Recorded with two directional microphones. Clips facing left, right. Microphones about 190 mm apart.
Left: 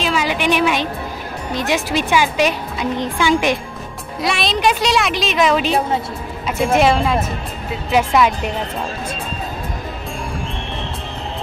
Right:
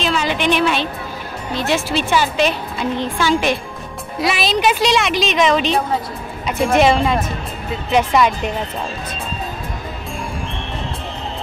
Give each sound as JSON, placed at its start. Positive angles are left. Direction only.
{"t": 0.0, "sound": "a woman's voice", "side_deg": 10}
{"t": 4.2, "sound": "speech", "side_deg": 0}